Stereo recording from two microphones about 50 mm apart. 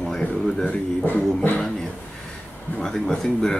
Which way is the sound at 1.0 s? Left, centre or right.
Left.